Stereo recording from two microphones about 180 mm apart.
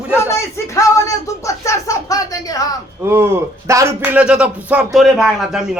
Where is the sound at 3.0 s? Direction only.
15° right (ahead or behind).